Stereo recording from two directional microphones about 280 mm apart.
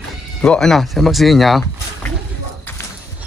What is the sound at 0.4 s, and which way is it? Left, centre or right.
Speech, centre.